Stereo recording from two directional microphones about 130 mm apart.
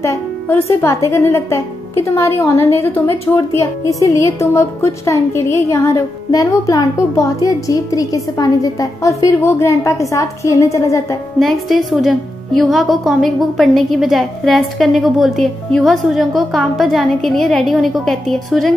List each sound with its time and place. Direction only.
0.0 s a woman's voice: 20° left (ahead or behind)
11.3 s a woman's voice: centre (ahead or behind)